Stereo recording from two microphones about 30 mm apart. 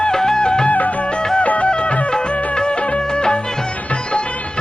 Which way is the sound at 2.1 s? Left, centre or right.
Left.